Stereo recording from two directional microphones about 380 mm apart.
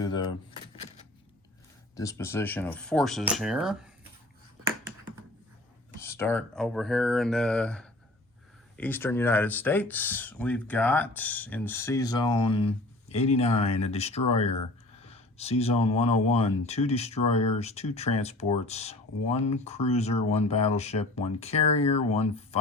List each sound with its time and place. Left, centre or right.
0.0 s speech: centre
2.0 s speech: centre
6.0 s speech: centre
15.0 s a sound: centre
16.0 s speech: centre